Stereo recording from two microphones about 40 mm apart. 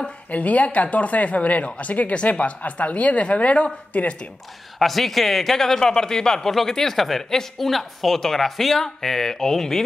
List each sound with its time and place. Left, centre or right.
0.3 s speech: left
4.7 s speech: centre